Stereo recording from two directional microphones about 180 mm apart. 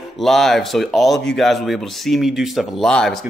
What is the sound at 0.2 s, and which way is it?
Speech, centre (ahead or behind).